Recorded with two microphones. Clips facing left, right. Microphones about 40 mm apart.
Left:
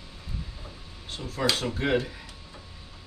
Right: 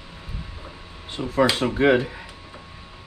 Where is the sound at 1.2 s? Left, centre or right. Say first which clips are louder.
Right 8 dB; right.